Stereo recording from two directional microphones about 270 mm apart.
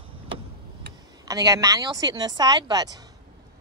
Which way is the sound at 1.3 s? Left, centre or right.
Centre.